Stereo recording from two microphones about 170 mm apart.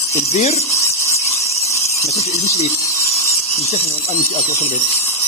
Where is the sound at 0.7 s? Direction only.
15° left (ahead or behind).